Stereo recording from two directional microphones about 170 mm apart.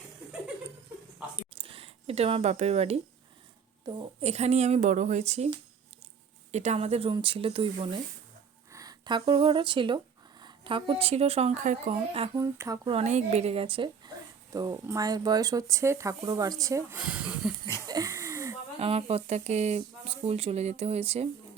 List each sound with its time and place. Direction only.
1.4 s a sound: 35° right (ahead or behind)
4.2 s speech: 40° right (ahead or behind)
6.5 s speech: 40° right (ahead or behind)
8.7 s speech: 20° right (ahead or behind); by 11.9 s 40° right (ahead or behind)
12.3 s speech: 20° right (ahead or behind)
12.9 s speech: 40° right (ahead or behind); by 17.5 s 5° right (ahead or behind)
17.8 s a sound: 20° right (ahead or behind)
18.8 s speech: 35° right (ahead or behind)